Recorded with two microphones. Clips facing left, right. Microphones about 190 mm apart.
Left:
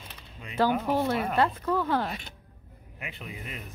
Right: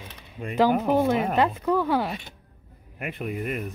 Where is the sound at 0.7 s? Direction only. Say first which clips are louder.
Right 5 dB; 50° right (ahead or behind).